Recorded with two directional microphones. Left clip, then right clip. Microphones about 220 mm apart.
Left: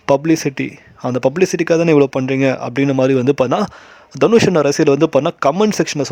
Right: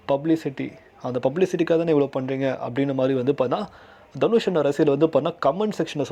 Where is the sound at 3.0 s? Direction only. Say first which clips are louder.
Left 8 dB; 60° left (ahead or behind).